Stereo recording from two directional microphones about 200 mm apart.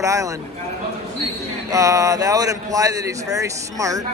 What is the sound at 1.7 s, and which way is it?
Speech, 15° right (ahead or behind).